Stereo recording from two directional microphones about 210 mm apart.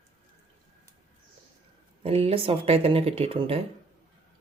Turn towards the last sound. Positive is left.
turn(degrees=-25)  # may be behind; listen again after turning